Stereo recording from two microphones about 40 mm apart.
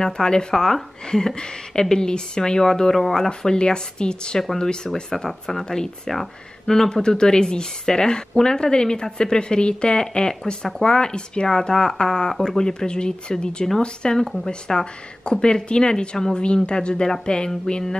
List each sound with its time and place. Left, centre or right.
0.0 s speech: centre
3.3 s speech: left
5.1 s speech: centre